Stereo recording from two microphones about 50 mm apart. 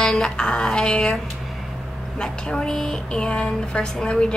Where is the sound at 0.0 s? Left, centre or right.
Centre.